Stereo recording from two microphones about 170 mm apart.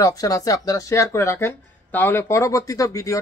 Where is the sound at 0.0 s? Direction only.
20° left (ahead or behind).